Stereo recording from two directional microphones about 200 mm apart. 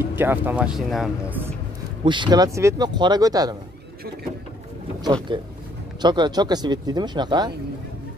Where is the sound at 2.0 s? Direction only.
25° right (ahead or behind).